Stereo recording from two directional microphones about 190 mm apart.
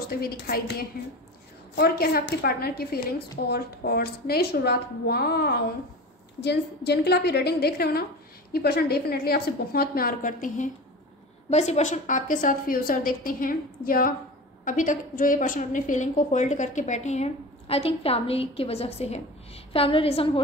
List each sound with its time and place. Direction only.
0.1 s a woman's voice: 55° left (ahead or behind); by 20.3 s 30° left (ahead or behind)